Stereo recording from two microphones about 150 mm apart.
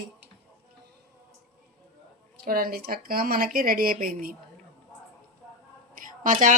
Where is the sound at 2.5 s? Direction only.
75° right (ahead or behind).